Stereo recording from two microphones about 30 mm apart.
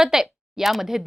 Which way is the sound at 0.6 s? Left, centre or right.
Centre.